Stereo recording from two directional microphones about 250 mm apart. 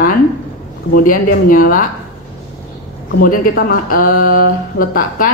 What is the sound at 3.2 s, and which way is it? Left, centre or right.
Speech, left.